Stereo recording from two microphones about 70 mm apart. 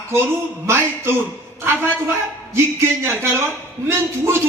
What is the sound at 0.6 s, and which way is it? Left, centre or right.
Speech, right.